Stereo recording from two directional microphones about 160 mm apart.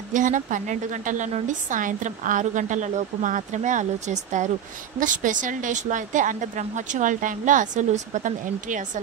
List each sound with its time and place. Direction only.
0.1 s a woman's voice: 55° right (ahead or behind)